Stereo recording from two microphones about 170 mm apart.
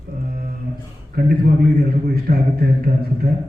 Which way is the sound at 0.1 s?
60° right (ahead or behind).